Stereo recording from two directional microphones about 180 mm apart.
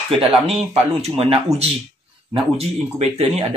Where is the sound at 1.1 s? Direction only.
30° right (ahead or behind).